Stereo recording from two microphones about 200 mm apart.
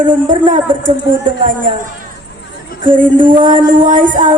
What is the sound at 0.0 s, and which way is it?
Speech, 40° right (ahead or behind).